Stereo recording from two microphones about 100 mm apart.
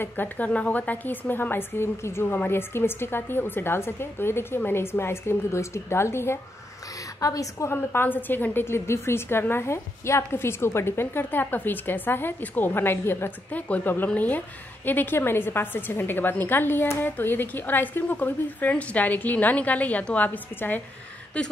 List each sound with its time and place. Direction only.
0.0 s a woman's voice: 20° left (ahead or behind); by 7.7 s 35° left (ahead or behind)
7.7 s a woman's voice: 20° left (ahead or behind)